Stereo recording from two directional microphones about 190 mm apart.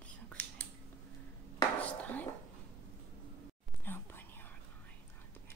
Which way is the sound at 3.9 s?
10° left (ahead or behind).